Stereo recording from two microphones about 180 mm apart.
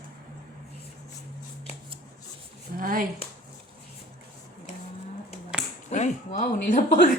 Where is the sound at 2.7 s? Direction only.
50° right (ahead or behind).